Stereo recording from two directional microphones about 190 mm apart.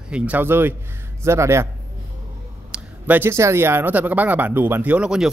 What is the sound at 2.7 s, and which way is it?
Speech, 10° right (ahead or behind).